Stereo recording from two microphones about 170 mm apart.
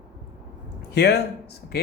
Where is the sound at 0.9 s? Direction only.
70° left (ahead or behind).